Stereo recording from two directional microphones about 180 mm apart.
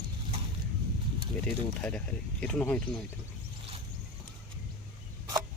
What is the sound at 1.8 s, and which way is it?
Speech, 5° left (ahead or behind).